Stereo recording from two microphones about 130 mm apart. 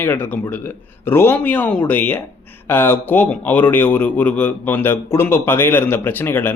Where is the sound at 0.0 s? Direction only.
15° left (ahead or behind).